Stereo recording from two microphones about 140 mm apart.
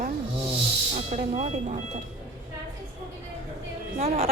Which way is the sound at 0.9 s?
55° right (ahead or behind).